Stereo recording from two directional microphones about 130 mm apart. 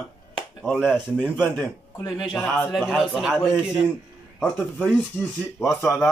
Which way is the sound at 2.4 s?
5° left (ahead or behind).